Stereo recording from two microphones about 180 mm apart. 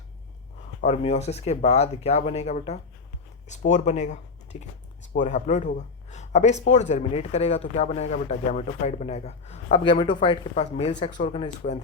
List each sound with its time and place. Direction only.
0.8 s a man's voice: 40° left (ahead or behind)
10.5 s a man's voice: 35° left (ahead or behind)